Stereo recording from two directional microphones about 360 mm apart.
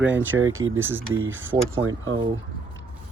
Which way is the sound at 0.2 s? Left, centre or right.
Right.